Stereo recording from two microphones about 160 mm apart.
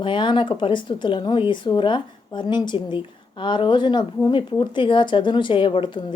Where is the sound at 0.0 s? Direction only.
30° left (ahead or behind).